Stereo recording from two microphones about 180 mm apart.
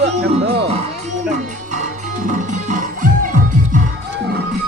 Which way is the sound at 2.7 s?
45° right (ahead or behind).